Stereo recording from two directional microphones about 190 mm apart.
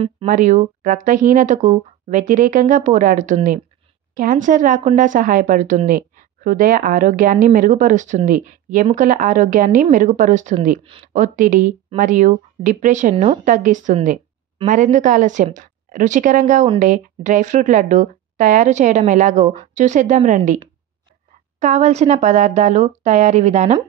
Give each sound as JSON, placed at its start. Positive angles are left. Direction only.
{"t": 0.3, "sound": "speech", "side_deg": -45}
{"t": 13.1, "sound": "a woman's voice", "side_deg": -30}
{"t": 13.4, "sound": "a woman's voice", "side_deg": -45}
{"t": 21.5, "sound": "a woman's voice", "side_deg": -40}